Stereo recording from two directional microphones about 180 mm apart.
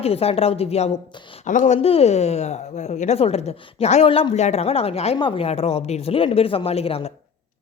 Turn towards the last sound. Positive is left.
turn(degrees=35)  # may be behind; listen again after turning